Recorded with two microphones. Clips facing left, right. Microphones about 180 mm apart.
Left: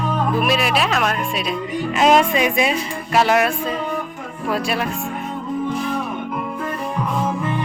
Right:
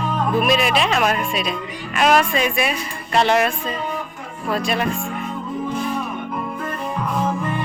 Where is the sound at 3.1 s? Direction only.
5° left (ahead or behind).